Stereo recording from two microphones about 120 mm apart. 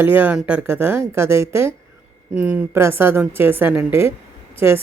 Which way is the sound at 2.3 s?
10° right (ahead or behind).